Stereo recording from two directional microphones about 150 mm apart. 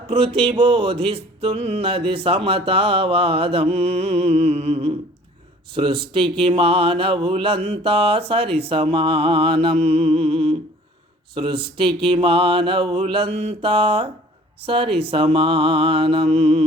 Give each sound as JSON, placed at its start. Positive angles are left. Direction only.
{"t": 0.1, "sound": "music", "side_deg": -40}